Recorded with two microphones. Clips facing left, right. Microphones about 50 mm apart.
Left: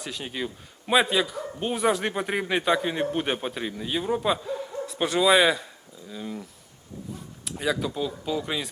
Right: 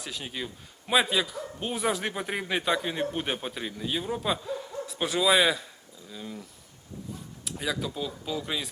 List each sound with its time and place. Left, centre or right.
0.0 s a man's voice: centre
7.4 s a man's voice: centre